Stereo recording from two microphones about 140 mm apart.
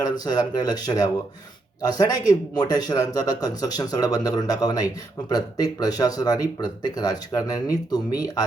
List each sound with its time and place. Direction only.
0.0 s speech: 30° left (ahead or behind)